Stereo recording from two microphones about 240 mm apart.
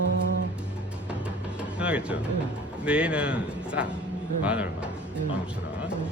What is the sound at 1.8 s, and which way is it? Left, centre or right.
A man's voice, centre.